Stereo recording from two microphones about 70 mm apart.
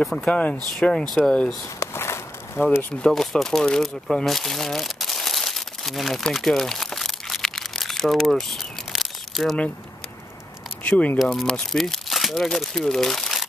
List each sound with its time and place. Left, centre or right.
0.0 s speech: centre
0.3 s speech: centre
1.8 s a sound: left
3.0 s speech: centre
4.1 s crumpling: centre
10.8 s speech: centre
11.1 s speech: centre